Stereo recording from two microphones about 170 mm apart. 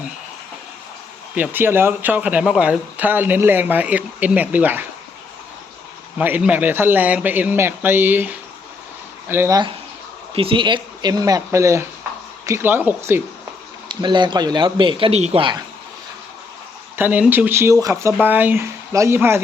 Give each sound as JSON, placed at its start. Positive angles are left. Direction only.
{"t": 1.4, "sound": "speech", "side_deg": -10}
{"t": 6.1, "sound": "speech", "side_deg": -10}
{"t": 10.3, "sound": "speech", "side_deg": -30}
{"t": 13.8, "sound": "speech", "side_deg": -25}
{"t": 17.0, "sound": "speech", "side_deg": -10}